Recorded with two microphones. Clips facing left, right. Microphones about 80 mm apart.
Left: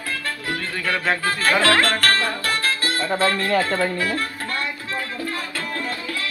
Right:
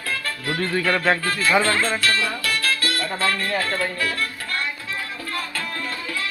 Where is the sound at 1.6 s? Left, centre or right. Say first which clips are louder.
Left 3 dB; left.